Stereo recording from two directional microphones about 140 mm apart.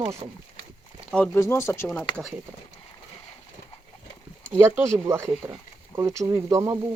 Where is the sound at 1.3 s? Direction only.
20° left (ahead or behind).